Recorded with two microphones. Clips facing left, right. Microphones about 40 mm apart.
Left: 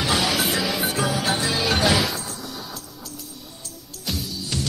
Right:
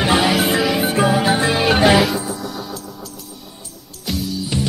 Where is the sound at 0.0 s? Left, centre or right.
Right.